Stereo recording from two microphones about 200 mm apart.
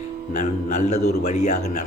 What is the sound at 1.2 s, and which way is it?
Speech, 35° left (ahead or behind).